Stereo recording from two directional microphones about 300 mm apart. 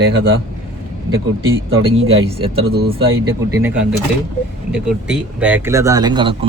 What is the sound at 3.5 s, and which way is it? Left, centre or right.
Speech, centre.